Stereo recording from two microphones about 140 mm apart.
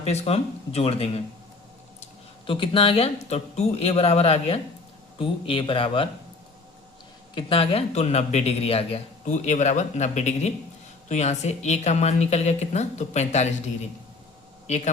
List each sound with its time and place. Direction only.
0.0 s a woman's voice: 45° left (ahead or behind)
2.5 s a woman's voice: 40° left (ahead or behind)
7.3 s a woman's voice: 40° left (ahead or behind)
9.2 s a woman's voice: 60° left (ahead or behind)